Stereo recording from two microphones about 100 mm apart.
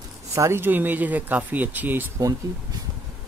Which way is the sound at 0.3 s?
30° right (ahead or behind).